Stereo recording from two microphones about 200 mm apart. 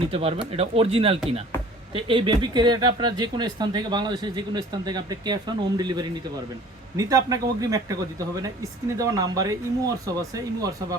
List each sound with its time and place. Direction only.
0.1 s speech: 30° right (ahead or behind)
1.5 s music: 10° left (ahead or behind)
1.9 s speech: 25° right (ahead or behind)